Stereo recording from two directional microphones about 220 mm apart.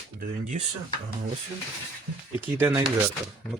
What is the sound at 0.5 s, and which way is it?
Speech, 35° right (ahead or behind).